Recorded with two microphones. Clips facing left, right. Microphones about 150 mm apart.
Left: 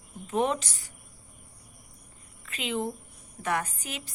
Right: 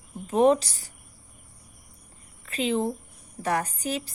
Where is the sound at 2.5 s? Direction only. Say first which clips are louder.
Right 6 dB; 35° right (ahead or behind).